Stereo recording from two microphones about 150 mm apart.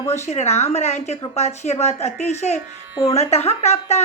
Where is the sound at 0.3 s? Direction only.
45° left (ahead or behind).